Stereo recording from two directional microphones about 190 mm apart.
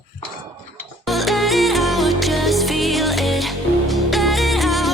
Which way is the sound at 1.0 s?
Centre (ahead or behind).